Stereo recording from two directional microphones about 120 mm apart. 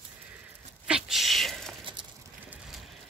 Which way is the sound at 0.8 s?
5° right (ahead or behind).